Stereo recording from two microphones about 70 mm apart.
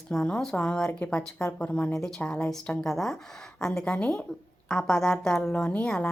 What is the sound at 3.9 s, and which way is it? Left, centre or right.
Speech, left.